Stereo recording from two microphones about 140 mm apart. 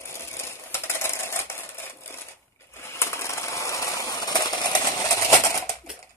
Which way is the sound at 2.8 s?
20° left (ahead or behind).